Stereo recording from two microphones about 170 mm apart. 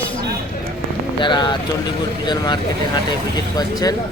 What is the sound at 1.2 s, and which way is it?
Speech, 25° left (ahead or behind).